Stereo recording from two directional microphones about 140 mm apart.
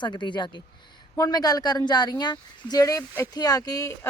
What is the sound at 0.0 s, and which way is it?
Speech, 35° left (ahead or behind).